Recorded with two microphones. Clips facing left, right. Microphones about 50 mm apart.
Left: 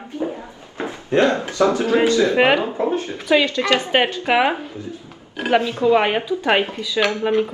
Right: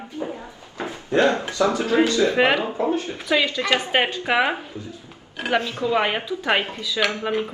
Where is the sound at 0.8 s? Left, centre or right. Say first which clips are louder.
Left 2 dB; left.